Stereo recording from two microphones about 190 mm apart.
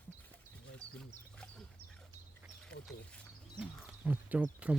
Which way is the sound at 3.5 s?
10° right (ahead or behind).